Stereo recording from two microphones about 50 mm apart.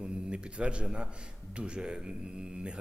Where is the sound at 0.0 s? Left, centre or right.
Right.